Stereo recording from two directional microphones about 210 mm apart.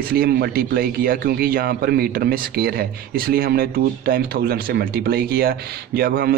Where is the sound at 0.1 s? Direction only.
45° right (ahead or behind).